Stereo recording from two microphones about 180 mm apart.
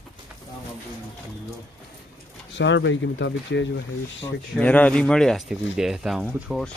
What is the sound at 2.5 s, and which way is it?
Speech, 90° left.